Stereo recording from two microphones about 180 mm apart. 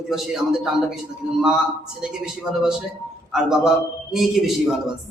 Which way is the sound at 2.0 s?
5° right (ahead or behind).